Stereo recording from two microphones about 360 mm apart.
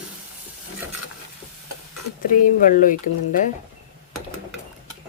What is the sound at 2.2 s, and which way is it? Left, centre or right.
Speech, left.